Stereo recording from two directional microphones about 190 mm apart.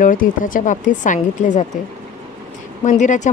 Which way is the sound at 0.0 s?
45° left (ahead or behind).